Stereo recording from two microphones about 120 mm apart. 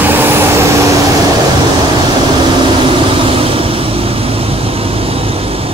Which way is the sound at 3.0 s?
45° right (ahead or behind).